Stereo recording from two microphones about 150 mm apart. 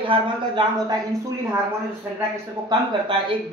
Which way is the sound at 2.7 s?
30° right (ahead or behind).